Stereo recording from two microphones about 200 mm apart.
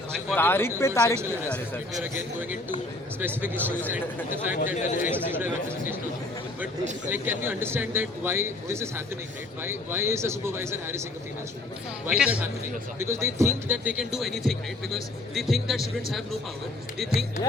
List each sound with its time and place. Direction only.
0.3 s speech: 10° left (ahead or behind)
2.1 s speech: 10° right (ahead or behind)
4.5 s speech: 40° left (ahead or behind)
5.1 s speech: 10° right (ahead or behind)
7.1 s speech: 10° right (ahead or behind)
12.0 s speech: 5° right (ahead or behind)